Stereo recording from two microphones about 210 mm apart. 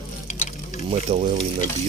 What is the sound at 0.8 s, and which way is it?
Speech, 30° right (ahead or behind).